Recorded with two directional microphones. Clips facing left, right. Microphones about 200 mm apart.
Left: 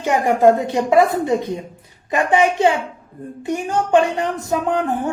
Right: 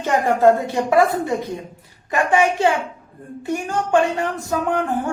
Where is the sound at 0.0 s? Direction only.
15° left (ahead or behind).